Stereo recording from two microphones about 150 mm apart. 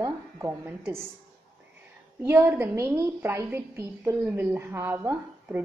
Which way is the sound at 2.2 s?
15° right (ahead or behind).